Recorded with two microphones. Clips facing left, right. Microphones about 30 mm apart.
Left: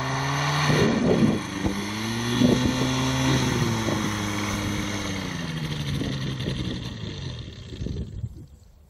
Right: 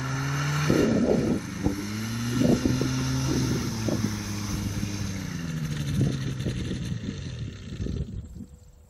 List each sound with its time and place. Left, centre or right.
0.0 s vehicle: left